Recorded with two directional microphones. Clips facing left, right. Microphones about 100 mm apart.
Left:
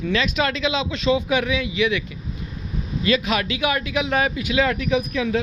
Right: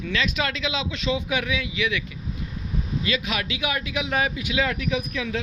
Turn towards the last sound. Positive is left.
turn(degrees=30)  # may be behind; listen again after turning